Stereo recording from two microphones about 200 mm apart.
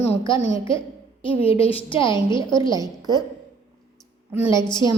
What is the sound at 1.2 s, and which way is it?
A woman's voice, 25° left (ahead or behind).